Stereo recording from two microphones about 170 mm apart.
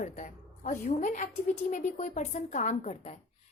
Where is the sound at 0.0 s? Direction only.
50° left (ahead or behind).